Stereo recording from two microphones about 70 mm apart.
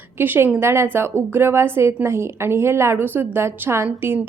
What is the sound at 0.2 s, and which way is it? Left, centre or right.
A woman's voice, right.